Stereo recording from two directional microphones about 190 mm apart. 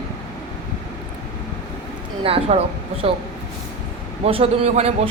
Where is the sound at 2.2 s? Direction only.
30° right (ahead or behind).